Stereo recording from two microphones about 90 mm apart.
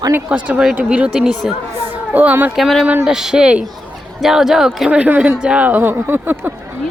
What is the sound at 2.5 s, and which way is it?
Speech, centre (ahead or behind).